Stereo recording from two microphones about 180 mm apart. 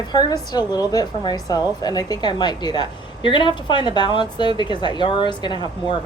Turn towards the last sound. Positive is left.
turn(degrees=25)  # may be behind; listen again after turning